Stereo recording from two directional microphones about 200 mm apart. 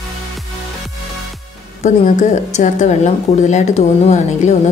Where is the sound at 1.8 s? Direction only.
35° left (ahead or behind).